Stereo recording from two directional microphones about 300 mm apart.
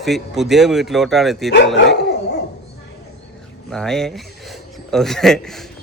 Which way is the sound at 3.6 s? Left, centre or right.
Centre.